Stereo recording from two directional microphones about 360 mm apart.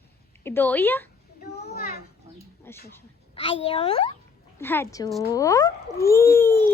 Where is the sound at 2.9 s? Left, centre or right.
Centre.